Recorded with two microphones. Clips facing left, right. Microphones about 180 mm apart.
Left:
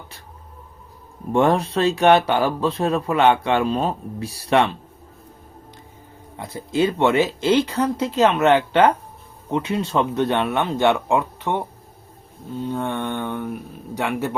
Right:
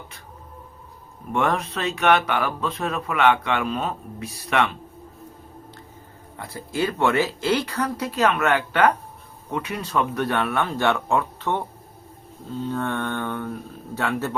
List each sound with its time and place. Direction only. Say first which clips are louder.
1.3 s speech: left 6 dB; 30° left (ahead or behind)
6.3 s speech: left 6 dB; 20° left (ahead or behind)